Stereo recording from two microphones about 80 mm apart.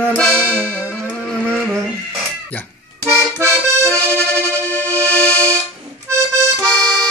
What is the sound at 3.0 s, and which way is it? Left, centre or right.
Music, right.